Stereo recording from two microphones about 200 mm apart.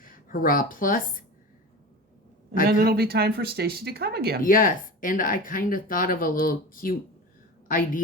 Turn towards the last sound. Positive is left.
turn(degrees=45)  # may be behind; listen again after turning